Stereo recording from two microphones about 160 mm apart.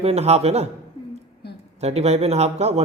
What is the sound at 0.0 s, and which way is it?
Speech, 40° right (ahead or behind).